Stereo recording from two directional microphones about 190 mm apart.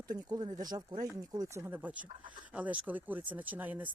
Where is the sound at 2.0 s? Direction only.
25° right (ahead or behind).